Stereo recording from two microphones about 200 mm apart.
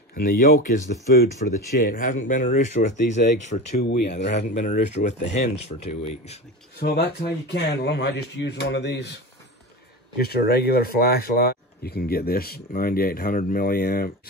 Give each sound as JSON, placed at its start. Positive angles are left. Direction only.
{"t": 0.1, "sound": "speech", "side_deg": 50}
{"t": 3.8, "sound": "speech", "side_deg": 55}
{"t": 4.4, "sound": "speech", "side_deg": 35}
{"t": 6.8, "sound": "speech", "side_deg": 50}
{"t": 10.2, "sound": "speech", "side_deg": 50}